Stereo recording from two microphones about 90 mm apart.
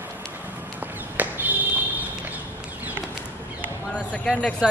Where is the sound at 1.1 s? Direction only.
20° right (ahead or behind).